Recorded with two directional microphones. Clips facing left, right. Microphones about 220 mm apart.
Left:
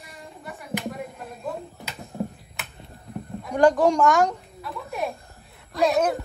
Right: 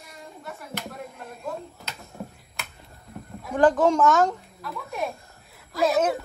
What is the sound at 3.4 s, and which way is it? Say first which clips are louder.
A child's voice: left 1 dB; centre (ahead or behind).